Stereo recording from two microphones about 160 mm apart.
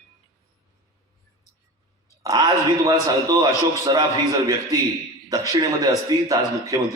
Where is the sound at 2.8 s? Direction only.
25° right (ahead or behind).